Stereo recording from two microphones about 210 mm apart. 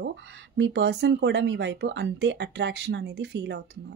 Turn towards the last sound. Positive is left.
turn(degrees=-55)  # may be behind; listen again after turning